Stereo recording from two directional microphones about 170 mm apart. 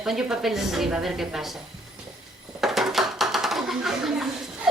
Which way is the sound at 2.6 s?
Centre (ahead or behind).